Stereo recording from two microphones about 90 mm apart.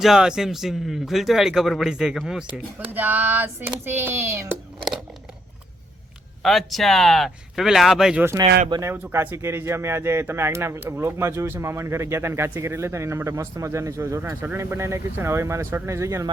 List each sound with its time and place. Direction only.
0.0 s speech: 5° right (ahead or behind)
2.9 s speech: 20° right (ahead or behind)
6.4 s speech: centre (ahead or behind)
8.8 s speech: 25° right (ahead or behind)
14.2 s speech: 25° right (ahead or behind)